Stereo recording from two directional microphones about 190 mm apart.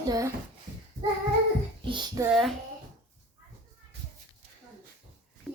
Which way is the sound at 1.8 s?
25° right (ahead or behind).